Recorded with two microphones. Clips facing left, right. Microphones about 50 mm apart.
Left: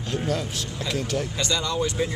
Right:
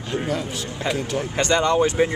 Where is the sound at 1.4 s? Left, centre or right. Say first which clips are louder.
Right 10 dB; right.